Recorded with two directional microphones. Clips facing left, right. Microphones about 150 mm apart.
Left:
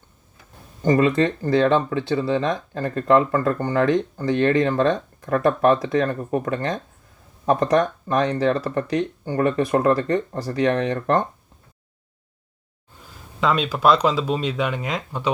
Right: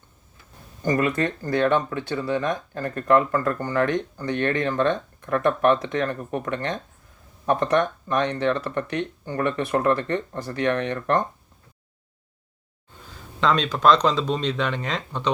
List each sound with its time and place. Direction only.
0.8 s speech: 25° left (ahead or behind)
13.4 s speech: 5° left (ahead or behind)